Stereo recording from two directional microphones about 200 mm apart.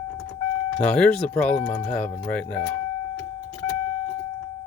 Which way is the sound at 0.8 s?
5° left (ahead or behind).